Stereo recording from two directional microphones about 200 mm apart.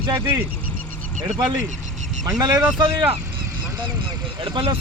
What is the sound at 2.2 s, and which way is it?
Speech, 15° right (ahead or behind).